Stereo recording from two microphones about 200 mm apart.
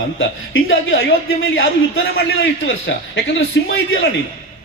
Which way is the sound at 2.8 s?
70° left (ahead or behind).